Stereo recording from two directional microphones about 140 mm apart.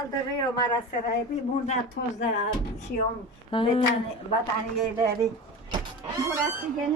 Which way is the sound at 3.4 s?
40° left (ahead or behind).